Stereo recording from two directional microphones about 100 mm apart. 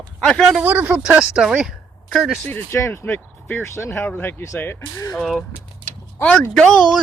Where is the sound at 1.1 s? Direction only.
10° right (ahead or behind).